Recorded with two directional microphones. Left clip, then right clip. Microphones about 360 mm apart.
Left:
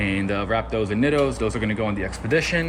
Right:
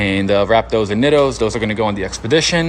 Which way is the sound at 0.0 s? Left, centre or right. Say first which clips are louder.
Right 9 dB; centre.